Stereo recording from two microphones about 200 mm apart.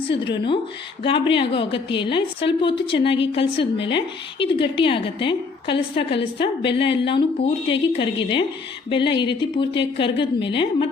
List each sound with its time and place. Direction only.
1.0 s a woman's voice: 25° left (ahead or behind)